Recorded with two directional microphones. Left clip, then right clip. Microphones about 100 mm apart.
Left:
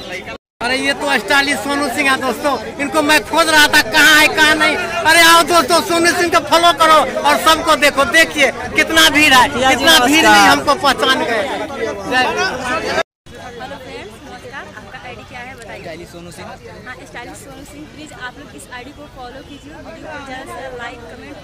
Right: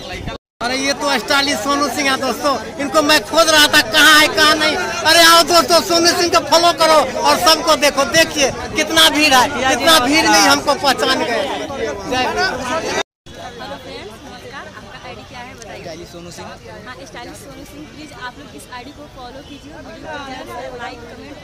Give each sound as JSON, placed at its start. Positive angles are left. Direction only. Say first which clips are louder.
{"t": 0.3, "sound": "a man's voice", "louder": "left 2 dB", "side_deg": -10}
{"t": 12.3, "sound": "speech", "louder": "even", "side_deg": 25}
{"t": 20.2, "sound": "speech", "louder": "even", "side_deg": -10}